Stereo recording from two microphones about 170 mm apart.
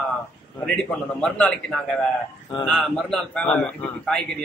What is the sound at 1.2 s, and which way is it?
A man's voice, 5° left (ahead or behind).